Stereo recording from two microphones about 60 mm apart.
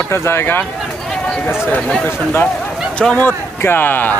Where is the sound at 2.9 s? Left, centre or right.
Centre.